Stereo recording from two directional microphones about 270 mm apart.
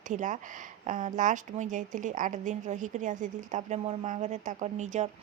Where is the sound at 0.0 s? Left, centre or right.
Right.